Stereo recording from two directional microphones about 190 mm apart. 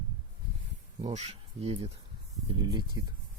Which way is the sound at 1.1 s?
35° right (ahead or behind).